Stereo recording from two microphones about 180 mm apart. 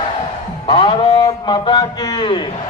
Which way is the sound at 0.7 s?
25° left (ahead or behind).